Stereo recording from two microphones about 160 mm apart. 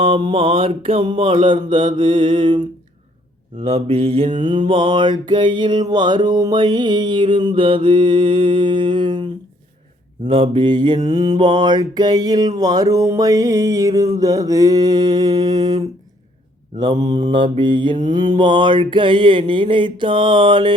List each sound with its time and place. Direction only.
0.0 s mantra: 30° right (ahead or behind)
3.6 s mantra: 40° right (ahead or behind)